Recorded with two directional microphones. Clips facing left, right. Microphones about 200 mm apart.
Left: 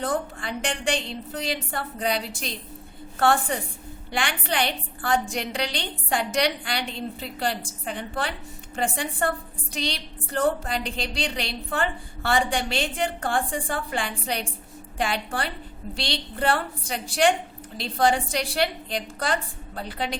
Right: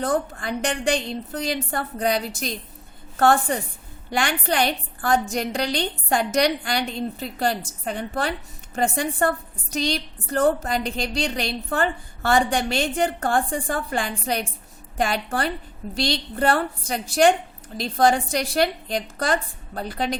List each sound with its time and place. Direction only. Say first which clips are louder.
0.0 s a woman's voice: right 4 dB; 45° right (ahead or behind)